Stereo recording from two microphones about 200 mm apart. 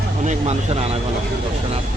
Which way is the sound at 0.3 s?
30° right (ahead or behind).